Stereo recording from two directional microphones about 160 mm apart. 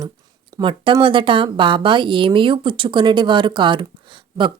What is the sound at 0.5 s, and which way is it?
Speech, 30° right (ahead or behind).